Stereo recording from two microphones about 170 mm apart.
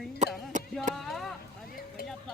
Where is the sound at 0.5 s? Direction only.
45° right (ahead or behind).